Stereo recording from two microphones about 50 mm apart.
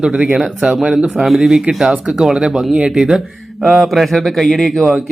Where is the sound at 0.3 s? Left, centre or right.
Centre.